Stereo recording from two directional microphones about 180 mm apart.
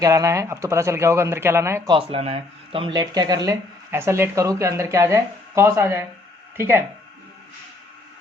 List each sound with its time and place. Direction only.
0.0 s speech: 20° right (ahead or behind)
2.0 s speech: 30° right (ahead or behind); by 6.8 s 15° right (ahead or behind)